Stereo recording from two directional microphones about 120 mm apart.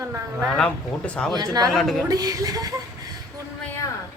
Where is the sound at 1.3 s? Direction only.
35° right (ahead or behind).